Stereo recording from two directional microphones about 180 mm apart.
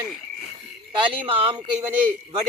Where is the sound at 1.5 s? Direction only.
10° right (ahead or behind).